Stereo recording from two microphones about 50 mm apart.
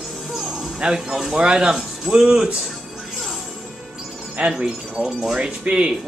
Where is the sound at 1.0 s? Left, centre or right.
Centre.